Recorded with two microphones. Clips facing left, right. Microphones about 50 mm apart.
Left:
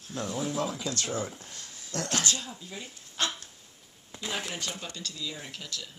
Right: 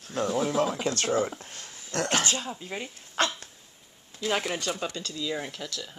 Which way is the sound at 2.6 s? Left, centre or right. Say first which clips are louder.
Right 6 dB; right.